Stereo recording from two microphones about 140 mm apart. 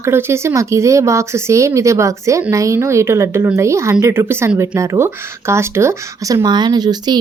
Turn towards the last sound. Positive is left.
turn(degrees=-30)  # may be behind; listen again after turning